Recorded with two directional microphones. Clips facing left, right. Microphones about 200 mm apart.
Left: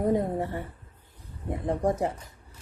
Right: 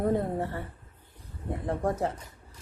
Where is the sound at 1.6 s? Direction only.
15° left (ahead or behind).